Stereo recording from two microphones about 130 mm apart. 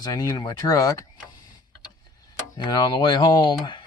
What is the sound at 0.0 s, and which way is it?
Speech, 30° left (ahead or behind).